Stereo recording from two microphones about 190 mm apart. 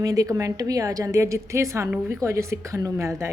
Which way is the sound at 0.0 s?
20° right (ahead or behind).